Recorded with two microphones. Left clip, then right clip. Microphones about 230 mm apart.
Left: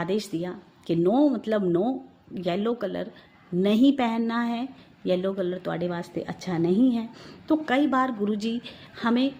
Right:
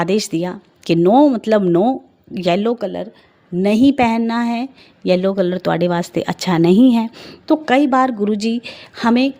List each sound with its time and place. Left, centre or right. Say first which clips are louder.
0.0 s speech: right 10 dB; right